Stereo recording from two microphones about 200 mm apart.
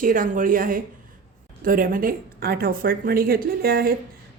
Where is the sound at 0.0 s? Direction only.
40° right (ahead or behind).